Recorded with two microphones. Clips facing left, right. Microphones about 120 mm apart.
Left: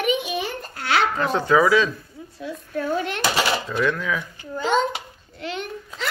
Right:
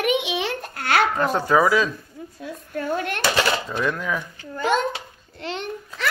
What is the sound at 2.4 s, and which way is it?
Speech, 50° right (ahead or behind).